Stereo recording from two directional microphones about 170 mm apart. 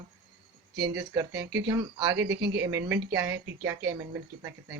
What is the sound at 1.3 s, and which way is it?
Speech, 80° right.